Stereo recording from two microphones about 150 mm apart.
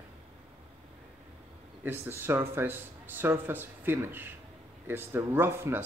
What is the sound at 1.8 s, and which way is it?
Speech, 15° right (ahead or behind).